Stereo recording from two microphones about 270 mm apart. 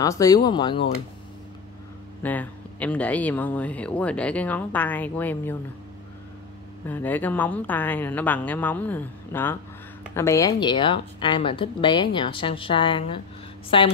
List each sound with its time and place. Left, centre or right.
0.0 s a woman's voice: centre
2.2 s speech: centre
6.9 s a woman's voice: centre